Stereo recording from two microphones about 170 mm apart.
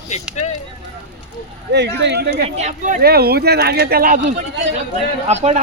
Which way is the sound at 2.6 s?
45° right (ahead or behind).